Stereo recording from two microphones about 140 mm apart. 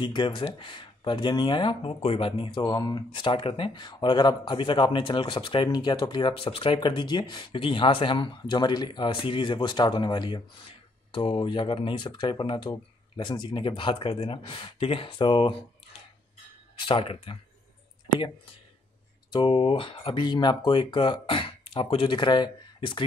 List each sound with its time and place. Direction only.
0.0 s speech: 35° left (ahead or behind)
2.6 s speech: 25° left (ahead or behind)
16.8 s speech: 40° left (ahead or behind)
19.3 s speech: 40° left (ahead or behind)